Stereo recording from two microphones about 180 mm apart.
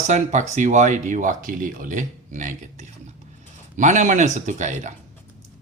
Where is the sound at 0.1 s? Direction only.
40° right (ahead or behind).